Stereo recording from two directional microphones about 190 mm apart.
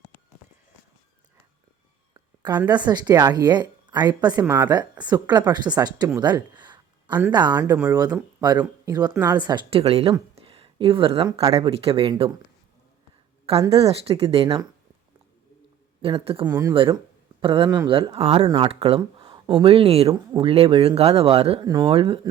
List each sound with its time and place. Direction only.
2.6 s speech: 20° right (ahead or behind)
4.4 s a woman's voice: 10° right (ahead or behind)
4.7 s a woman's voice: 20° right (ahead or behind)
13.7 s speech: 30° right (ahead or behind)
16.0 s speech: 30° right (ahead or behind)